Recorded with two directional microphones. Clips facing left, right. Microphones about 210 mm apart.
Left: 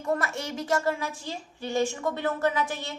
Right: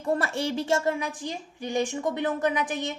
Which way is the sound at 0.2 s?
30° right (ahead or behind).